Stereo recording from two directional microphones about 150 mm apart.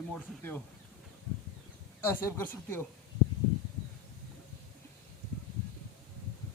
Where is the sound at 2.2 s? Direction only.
15° left (ahead or behind).